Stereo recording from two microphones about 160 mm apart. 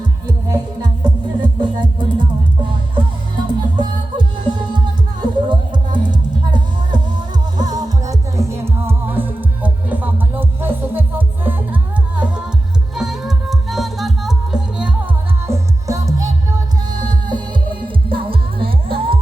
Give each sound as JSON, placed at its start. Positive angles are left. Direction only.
{"t": 0.3, "sound": "music", "side_deg": -25}